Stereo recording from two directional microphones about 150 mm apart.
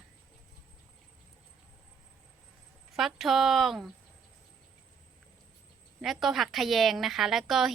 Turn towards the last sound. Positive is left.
turn(degrees=0)  # may be behind; listen again after turning